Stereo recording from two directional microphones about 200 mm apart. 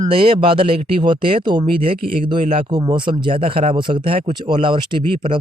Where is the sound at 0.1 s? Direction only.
25° right (ahead or behind).